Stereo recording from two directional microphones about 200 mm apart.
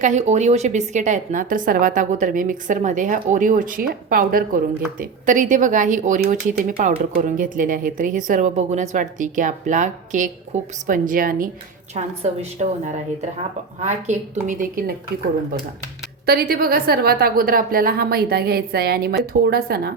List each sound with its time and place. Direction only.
0.0 s a woman's voice: 35° right (ahead or behind)
11.9 s a woman's voice: 30° right (ahead or behind)
13.8 s a woman's voice: 35° right (ahead or behind)
16.2 s a woman's voice: 50° right (ahead or behind)